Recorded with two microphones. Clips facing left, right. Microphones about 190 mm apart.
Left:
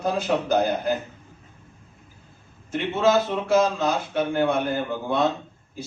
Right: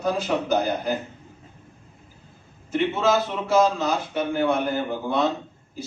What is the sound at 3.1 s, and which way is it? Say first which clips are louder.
A man's voice: left 1 dB; 55° left (ahead or behind).